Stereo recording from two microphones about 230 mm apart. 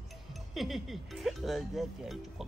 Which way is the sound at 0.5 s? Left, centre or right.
Centre.